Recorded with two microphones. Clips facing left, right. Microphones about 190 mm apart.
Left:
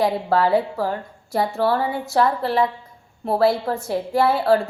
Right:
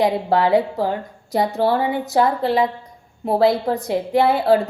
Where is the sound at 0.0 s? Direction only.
15° right (ahead or behind).